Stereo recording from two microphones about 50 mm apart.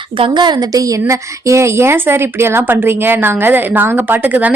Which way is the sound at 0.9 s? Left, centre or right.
Right.